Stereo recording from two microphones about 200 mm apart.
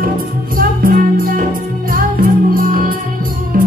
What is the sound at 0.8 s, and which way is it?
Music, 45° right (ahead or behind).